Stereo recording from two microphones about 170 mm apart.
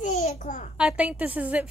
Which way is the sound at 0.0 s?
40° left (ahead or behind).